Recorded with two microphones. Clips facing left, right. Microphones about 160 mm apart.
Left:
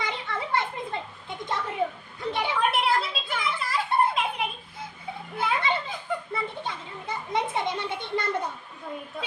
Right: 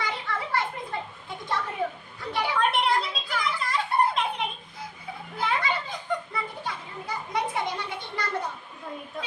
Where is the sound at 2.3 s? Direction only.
20° left (ahead or behind).